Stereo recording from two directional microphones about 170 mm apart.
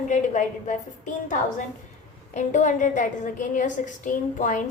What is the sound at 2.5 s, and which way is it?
A woman's voice, 45° left (ahead or behind).